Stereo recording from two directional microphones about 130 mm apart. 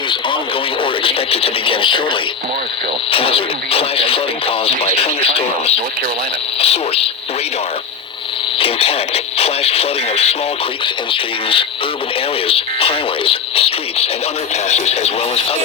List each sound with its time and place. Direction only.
1.0 s speech: 45° left (ahead or behind)
3.1 s speech: 45° left (ahead or behind)
8.5 s speech: 45° left (ahead or behind)